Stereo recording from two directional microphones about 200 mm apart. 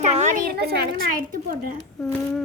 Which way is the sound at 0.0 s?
35° right (ahead or behind).